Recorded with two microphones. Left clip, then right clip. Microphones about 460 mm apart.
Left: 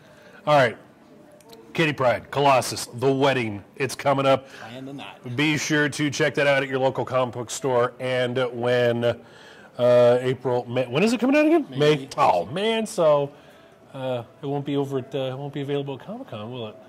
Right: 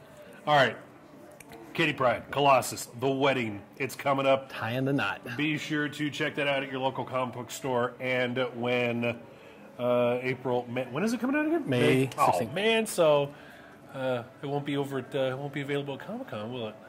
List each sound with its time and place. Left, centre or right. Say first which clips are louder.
0.5 s a man's voice: left 5 dB; left
4.6 s chopping: right 8 dB; right
5.4 s a man's voice: left 10 dB; left
12.2 s speech: left 5 dB; left